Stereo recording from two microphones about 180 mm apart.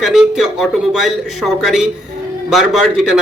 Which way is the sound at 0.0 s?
Centre (ahead or behind).